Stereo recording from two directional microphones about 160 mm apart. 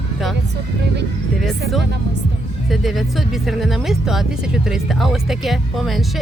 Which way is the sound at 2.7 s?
Centre (ahead or behind).